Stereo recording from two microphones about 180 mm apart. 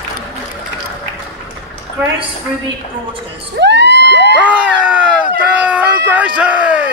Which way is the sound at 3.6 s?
70° right (ahead or behind).